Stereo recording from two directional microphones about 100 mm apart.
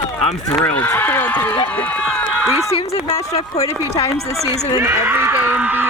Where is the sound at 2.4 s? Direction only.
5° right (ahead or behind).